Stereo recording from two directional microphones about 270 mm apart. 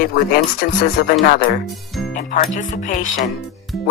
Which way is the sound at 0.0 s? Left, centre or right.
Left.